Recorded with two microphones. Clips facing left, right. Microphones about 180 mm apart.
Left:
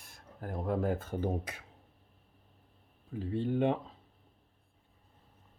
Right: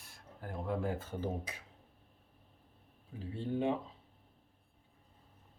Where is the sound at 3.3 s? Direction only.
60° left (ahead or behind).